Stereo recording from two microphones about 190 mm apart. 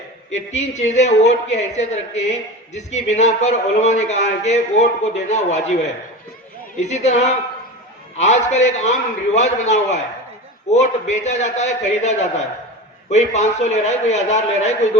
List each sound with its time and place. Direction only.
0.3 s a man's voice: 35° left (ahead or behind)